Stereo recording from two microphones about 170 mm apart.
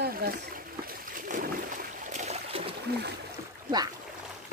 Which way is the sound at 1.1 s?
55° right (ahead or behind).